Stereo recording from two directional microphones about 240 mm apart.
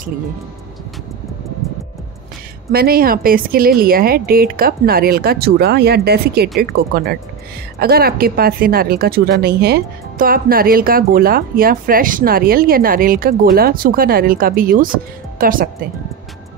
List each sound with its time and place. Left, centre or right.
2.7 s speech: right